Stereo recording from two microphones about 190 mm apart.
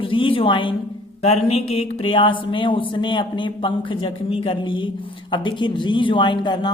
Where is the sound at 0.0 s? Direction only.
30° left (ahead or behind).